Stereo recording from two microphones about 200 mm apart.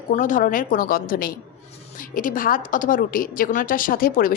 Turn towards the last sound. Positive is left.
turn(degrees=45)  # may be behind; listen again after turning